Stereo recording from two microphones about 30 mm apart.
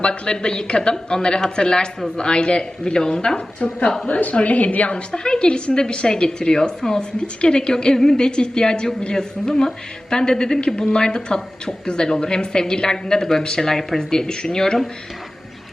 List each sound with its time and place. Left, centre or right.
0.0 s speech: left
3.3 s a woman's voice: left
4.9 s a woman's voice: left
7.2 s speech: left
13.4 s speech: left
13.7 s speech: centre
14.0 s speech: left